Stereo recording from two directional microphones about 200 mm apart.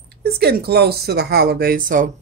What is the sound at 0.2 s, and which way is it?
Speech, 50° right (ahead or behind).